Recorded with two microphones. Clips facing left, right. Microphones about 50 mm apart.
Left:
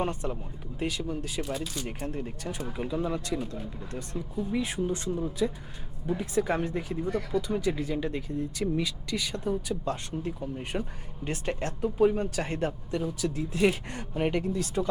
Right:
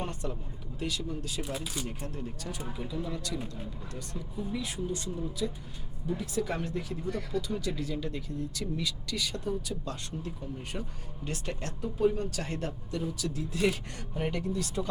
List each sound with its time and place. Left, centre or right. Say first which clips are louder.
0.0 s speech: left 5 dB; left
1.4 s speech: left 3 dB; centre
2.0 s speech: left 4 dB; left
4.5 s speech: left 6 dB; left
7.4 s speech: left 5 dB; left